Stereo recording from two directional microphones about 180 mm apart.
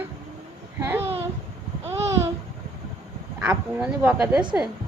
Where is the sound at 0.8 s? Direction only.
10° right (ahead or behind).